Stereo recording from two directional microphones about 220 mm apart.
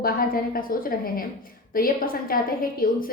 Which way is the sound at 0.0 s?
40° left (ahead or behind).